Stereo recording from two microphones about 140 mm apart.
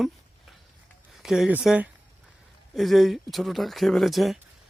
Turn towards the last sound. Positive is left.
turn(degrees=0)  # may be behind; listen again after turning